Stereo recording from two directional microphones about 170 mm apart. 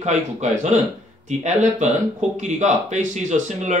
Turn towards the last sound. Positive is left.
turn(degrees=-45)  # may be behind; listen again after turning